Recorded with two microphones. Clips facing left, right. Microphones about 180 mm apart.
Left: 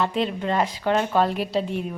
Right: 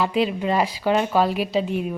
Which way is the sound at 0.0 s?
5° right (ahead or behind).